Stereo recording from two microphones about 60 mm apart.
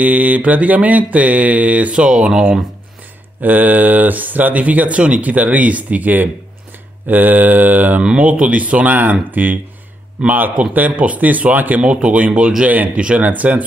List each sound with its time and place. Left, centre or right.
0.0 s speech: right; by 2.6 s centre
3.3 s speech: right
8.0 s speech: centre